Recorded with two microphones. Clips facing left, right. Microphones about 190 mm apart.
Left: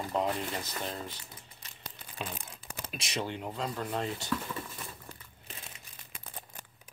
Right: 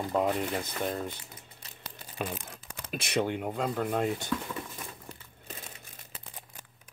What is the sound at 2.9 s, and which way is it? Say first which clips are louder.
Speech: right 7 dB; 55° right (ahead or behind).